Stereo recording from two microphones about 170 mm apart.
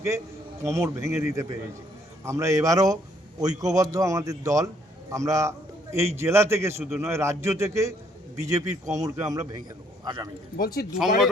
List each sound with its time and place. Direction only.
0.6 s a man's voice: 15° right (ahead or behind)
10.6 s speech: 60° left (ahead or behind)
10.9 s speech: centre (ahead or behind)